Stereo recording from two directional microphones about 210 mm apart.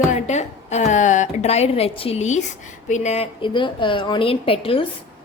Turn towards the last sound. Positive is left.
turn(degrees=25)  # may be behind; listen again after turning